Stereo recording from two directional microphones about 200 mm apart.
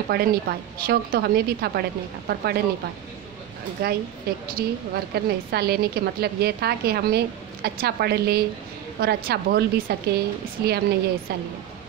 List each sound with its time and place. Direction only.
0.1 s a woman's voice: 50° right (ahead or behind)
3.8 s a woman's voice: 50° right (ahead or behind)